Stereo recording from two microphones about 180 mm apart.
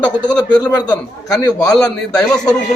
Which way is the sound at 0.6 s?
20° left (ahead or behind).